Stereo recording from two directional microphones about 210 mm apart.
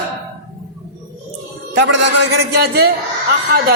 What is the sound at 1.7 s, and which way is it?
A man's voice, 60° right (ahead or behind).